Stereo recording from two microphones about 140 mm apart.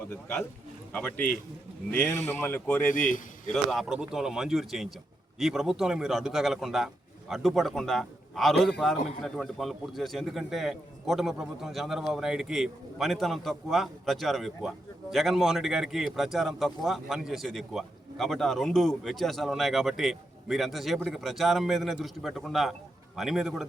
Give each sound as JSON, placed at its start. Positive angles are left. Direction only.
{"t": 0.9, "sound": "speech", "side_deg": 10}
{"t": 2.4, "sound": "speech", "side_deg": 15}
{"t": 2.9, "sound": "a man's voice", "side_deg": 70}
{"t": 3.7, "sound": "a man's voice", "side_deg": 0}